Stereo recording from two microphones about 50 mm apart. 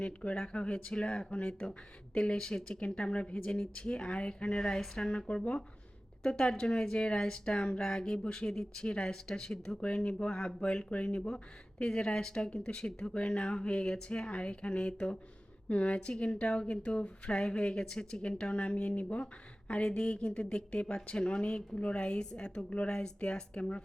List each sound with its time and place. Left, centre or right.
0.0 s a woman's voice: left